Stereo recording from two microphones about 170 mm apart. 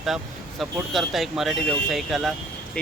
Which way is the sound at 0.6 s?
Centre (ahead or behind).